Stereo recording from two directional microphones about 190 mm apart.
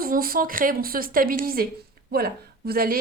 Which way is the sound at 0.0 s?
50° right (ahead or behind).